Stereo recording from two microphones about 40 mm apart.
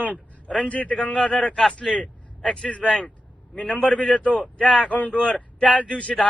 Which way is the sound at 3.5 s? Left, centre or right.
Left.